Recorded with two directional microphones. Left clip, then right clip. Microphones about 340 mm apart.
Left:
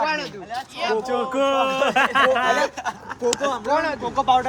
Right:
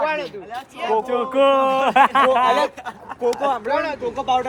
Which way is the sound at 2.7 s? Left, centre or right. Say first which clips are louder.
Left 3 dB; left.